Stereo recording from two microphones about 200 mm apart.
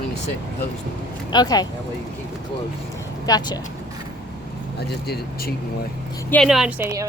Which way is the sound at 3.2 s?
20° left (ahead or behind).